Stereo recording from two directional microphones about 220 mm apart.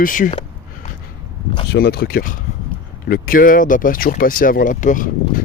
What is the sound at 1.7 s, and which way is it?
Speech, 45° left (ahead or behind).